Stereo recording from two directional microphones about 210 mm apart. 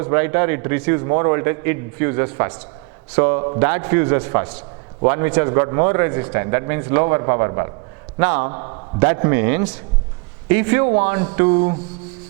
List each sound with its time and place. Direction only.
0.0 s a man's voice: 15° right (ahead or behind)
8.5 s a man's voice: 25° right (ahead or behind)